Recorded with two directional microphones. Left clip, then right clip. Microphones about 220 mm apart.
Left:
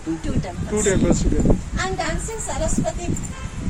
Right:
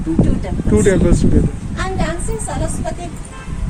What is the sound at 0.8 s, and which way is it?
Speech, 40° right (ahead or behind).